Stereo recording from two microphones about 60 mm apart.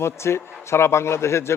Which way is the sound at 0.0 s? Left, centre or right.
Left.